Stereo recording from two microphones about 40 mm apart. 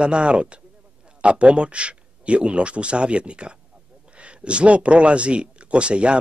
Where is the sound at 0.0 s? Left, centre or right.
Right.